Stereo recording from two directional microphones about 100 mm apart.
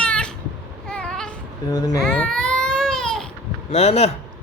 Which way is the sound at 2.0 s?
10° left (ahead or behind).